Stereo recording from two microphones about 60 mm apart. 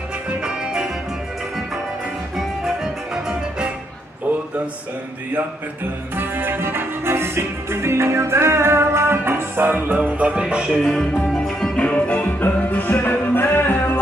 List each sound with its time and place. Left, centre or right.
0.3 s music: centre
2.3 s music: centre
6.1 s music: right; by 10.7 s centre
10.7 s music: centre; by 13.9 s left